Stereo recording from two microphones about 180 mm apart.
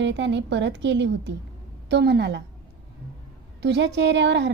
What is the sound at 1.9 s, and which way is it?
Speech, 65° right (ahead or behind).